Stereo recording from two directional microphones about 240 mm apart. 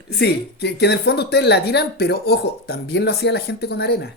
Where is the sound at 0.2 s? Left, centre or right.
Left.